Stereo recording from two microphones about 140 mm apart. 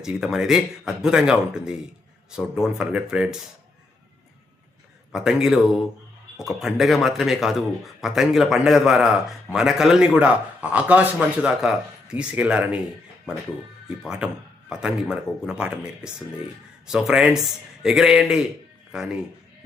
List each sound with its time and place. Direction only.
0.0 s speech: 5° right (ahead or behind)
5.1 s speech: 5° right (ahead or behind)
14.0 s speech: 5° right (ahead or behind)